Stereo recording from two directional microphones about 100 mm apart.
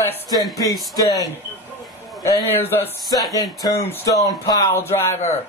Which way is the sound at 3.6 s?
40° left (ahead or behind).